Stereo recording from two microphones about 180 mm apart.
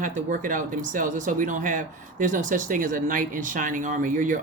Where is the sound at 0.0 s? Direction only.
45° right (ahead or behind).